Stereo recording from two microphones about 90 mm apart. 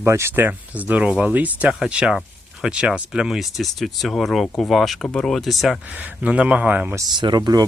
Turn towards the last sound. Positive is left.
turn(degrees=-50)  # may be behind; listen again after turning